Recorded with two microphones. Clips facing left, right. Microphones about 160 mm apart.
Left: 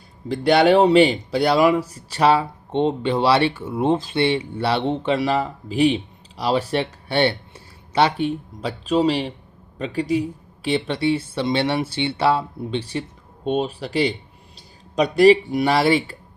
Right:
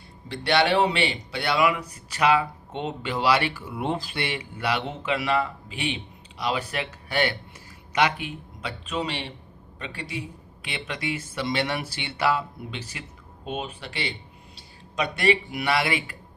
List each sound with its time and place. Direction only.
0.3 s speech: 40° left (ahead or behind)